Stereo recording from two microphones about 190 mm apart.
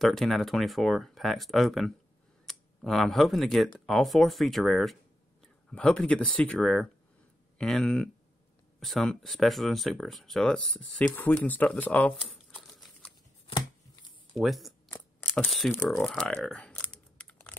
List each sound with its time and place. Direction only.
0.0 s speech: centre (ahead or behind)
12.2 s crumpling: centre (ahead or behind)
14.3 s speech: centre (ahead or behind)
14.9 s crumpling: 10° left (ahead or behind)
15.7 s speech: 15° left (ahead or behind)
16.0 s typing: 5° left (ahead or behind)